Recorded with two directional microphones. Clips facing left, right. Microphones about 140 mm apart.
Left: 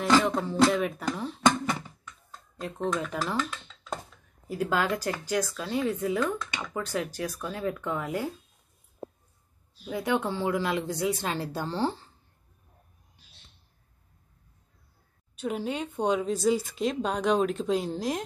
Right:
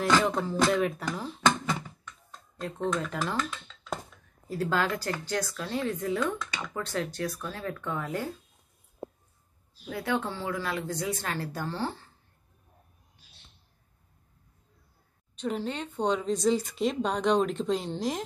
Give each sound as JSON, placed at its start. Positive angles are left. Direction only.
{"t": 0.2, "sound": "speech", "side_deg": 0}
{"t": 2.5, "sound": "a woman's voice", "side_deg": 5}
{"t": 9.8, "sound": "a woman's voice", "side_deg": 15}
{"t": 15.3, "sound": "speech", "side_deg": 10}